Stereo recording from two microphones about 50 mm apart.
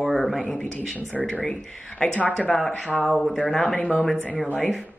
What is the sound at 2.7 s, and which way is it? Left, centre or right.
Speech, centre.